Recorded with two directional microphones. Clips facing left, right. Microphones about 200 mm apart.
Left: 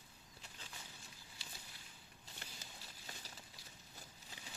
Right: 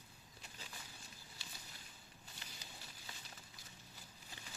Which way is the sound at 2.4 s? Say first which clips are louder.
Left 3 dB; 55° left (ahead or behind).